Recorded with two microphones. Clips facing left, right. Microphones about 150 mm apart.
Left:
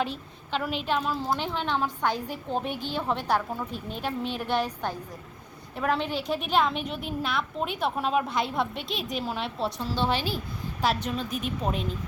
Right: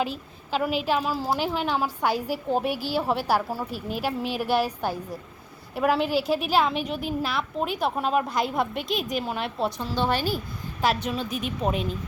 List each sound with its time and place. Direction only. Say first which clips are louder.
0.0 s a woman's voice: right 2 dB; 5° right (ahead or behind)